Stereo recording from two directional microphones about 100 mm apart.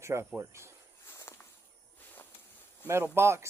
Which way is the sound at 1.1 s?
30° left (ahead or behind).